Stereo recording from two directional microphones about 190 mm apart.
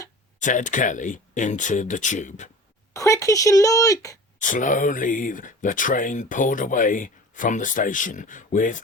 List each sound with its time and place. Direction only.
0.3 s speech: 40° left (ahead or behind)
2.9 s speech: 15° left (ahead or behind)
4.4 s speech: 45° left (ahead or behind)